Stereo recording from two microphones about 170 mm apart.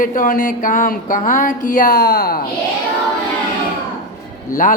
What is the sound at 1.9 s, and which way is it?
Speech, 75° left (ahead or behind).